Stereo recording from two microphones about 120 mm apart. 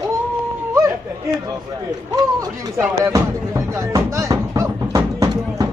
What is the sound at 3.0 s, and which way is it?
Music, 25° right (ahead or behind).